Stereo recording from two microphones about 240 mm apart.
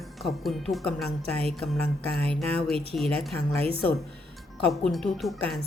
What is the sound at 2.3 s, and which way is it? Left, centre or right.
Music, centre.